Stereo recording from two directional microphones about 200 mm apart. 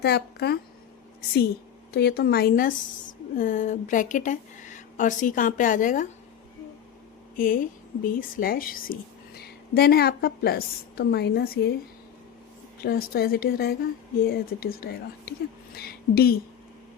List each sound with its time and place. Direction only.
0.0 s speech: 55° left (ahead or behind)
1.9 s speech: 55° left (ahead or behind)
7.3 s a woman's voice: 45° left (ahead or behind)
12.8 s speech: 50° left (ahead or behind)